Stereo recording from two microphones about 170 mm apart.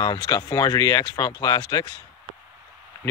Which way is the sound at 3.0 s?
15° left (ahead or behind).